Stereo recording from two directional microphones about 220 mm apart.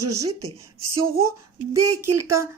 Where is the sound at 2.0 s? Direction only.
90° right.